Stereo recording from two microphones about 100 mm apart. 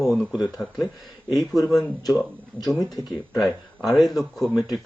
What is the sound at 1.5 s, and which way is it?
Speech, 35° left (ahead or behind).